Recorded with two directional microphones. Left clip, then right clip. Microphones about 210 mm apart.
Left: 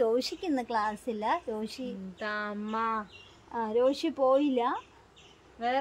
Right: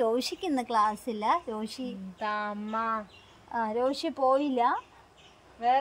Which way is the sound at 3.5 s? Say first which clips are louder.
Left 1 dB; 25° right (ahead or behind).